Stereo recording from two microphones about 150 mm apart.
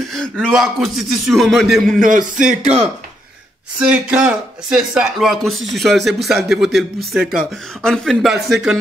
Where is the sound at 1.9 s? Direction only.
65° right (ahead or behind).